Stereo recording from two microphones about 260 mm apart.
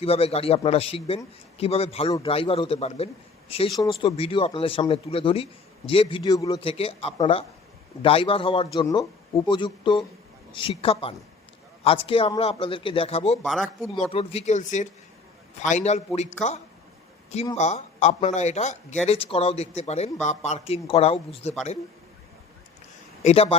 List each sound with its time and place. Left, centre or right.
0.0 s speech: left
13.4 s speech: centre
14.1 s speech: left
23.2 s speech: left